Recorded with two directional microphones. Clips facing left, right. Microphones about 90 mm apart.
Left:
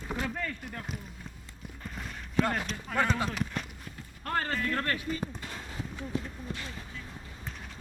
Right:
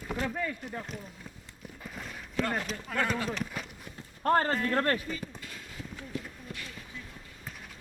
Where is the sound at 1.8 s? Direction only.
Centre (ahead or behind).